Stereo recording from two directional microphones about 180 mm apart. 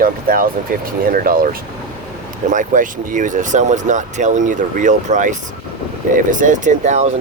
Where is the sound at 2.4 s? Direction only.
45° right (ahead or behind).